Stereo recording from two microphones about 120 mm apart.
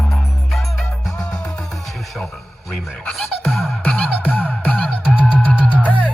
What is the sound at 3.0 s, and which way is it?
Music, 5° left (ahead or behind).